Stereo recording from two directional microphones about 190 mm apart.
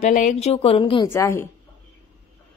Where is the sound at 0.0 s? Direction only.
40° left (ahead or behind).